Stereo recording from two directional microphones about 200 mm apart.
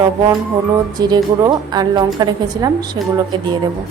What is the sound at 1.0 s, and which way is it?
A woman's voice, 20° right (ahead or behind).